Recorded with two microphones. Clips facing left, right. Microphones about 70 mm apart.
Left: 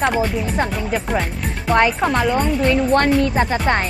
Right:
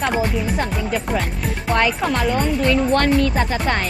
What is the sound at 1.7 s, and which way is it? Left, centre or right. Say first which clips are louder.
Speech: left 3 dB; centre.